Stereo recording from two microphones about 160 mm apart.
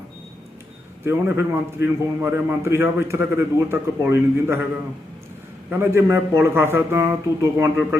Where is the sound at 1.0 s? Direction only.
15° right (ahead or behind).